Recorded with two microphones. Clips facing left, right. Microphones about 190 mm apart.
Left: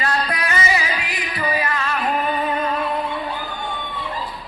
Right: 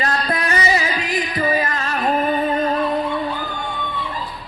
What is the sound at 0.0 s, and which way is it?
Music, 40° right (ahead or behind).